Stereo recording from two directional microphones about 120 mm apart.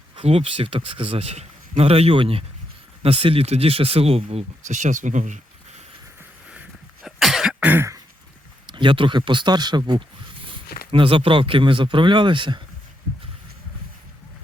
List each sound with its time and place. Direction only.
0.2 s a man's voice: 55° right (ahead or behind); by 5.8 s 90° right
6.5 s a sound: 10° right (ahead or behind)
7.2 s cough: centre (ahead or behind)
7.6 s throat clearing: 15° right (ahead or behind)
8.6 s speech: 40° right (ahead or behind)